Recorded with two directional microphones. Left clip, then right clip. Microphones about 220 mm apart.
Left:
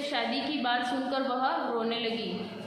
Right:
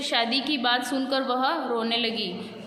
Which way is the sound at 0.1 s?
50° right (ahead or behind).